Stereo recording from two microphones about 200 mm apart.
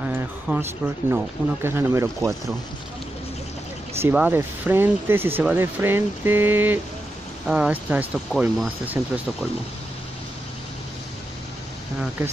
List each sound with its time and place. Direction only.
0.1 s speech: 10° right (ahead or behind)
4.0 s speech: 10° right (ahead or behind)